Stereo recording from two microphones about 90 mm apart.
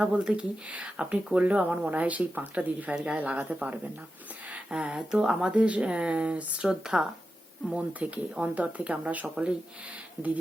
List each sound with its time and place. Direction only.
0.0 s speech: 10° right (ahead or behind)